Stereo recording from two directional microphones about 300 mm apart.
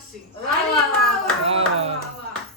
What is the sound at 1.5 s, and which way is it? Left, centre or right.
Speech, centre.